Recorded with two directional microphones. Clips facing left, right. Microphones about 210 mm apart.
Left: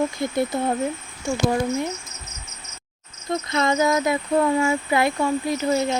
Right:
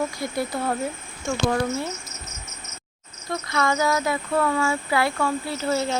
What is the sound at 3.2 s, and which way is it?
Speech, 20° left (ahead or behind).